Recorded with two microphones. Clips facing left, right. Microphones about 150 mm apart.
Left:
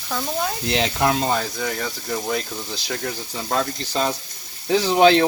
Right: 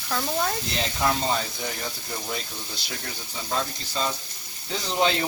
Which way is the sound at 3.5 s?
65° left (ahead or behind).